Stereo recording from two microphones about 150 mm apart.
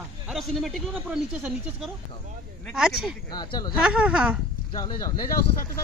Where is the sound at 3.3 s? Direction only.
25° left (ahead or behind).